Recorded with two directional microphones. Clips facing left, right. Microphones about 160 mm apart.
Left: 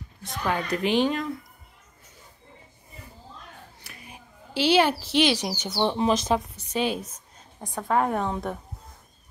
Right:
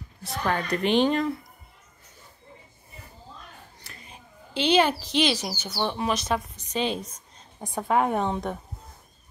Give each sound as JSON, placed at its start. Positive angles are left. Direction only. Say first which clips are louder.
{"t": 0.5, "sound": "a woman's voice", "louder": "even", "side_deg": 5}
{"t": 3.8, "sound": "a sound", "louder": "left 1 dB", "side_deg": 10}
{"t": 5.1, "sound": "speech", "louder": "left 2 dB", "side_deg": 15}
{"t": 6.5, "sound": "a woman's voice", "louder": "left 1 dB", "side_deg": 10}
{"t": 7.6, "sound": "a woman's voice", "louder": "right 1 dB", "side_deg": -10}